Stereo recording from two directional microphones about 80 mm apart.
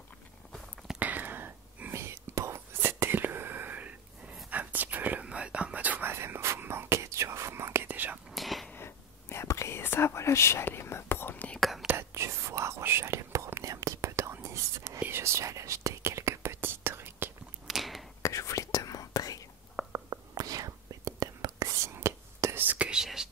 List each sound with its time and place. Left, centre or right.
0.9 s whispering: right
8.3 s whispering: centre
8.7 s whispering: left
12.0 s whispering: right
17.6 s a sound: centre
18.2 s whispering: left
19.9 s whispering: right
21.9 s whispering: right; by 23.3 s centre